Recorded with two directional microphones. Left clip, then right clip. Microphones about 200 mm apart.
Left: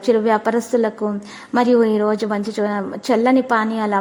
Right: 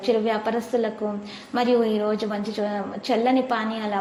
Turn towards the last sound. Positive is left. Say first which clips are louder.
# left 7 dB
turn(degrees=40)  # may be behind; listen again after turning